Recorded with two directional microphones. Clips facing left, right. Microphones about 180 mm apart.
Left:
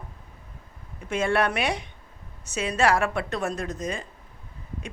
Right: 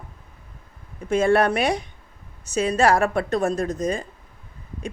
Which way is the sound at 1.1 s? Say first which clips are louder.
Right 6 dB; 40° right (ahead or behind).